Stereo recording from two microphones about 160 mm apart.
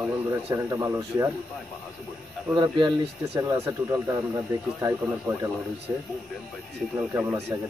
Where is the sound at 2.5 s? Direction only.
25° right (ahead or behind).